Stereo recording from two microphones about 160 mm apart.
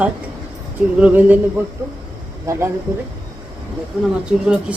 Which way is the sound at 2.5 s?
20° right (ahead or behind).